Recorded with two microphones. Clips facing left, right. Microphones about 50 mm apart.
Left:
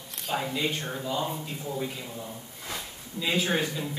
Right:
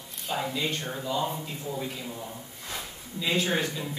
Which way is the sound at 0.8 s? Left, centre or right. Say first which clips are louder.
Right 1 dB; centre.